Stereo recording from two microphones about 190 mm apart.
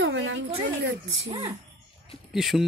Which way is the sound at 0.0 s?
85° right.